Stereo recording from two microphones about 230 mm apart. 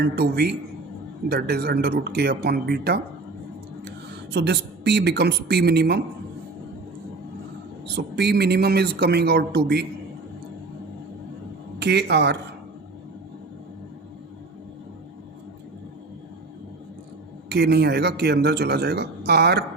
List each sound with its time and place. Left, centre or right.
0.0 s speech: right
4.3 s speech: right
7.9 s speech: right
11.8 s speech: right
17.5 s speech: right